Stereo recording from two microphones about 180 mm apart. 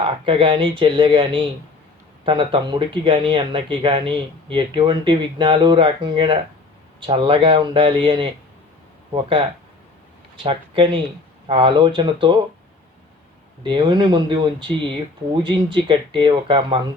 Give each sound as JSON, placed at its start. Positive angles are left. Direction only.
{"t": 0.0, "sound": "speech", "side_deg": -30}
{"t": 10.4, "sound": "speech", "side_deg": -30}
{"t": 13.7, "sound": "speech", "side_deg": -25}